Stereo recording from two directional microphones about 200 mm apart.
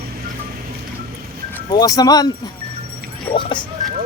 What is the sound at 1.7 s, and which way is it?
Speech, 20° left (ahead or behind).